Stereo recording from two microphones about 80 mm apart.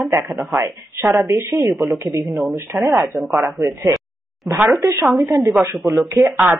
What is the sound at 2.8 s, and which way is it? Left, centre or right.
Speech, right.